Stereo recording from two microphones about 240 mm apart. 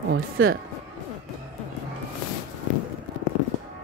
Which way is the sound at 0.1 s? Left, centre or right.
Right.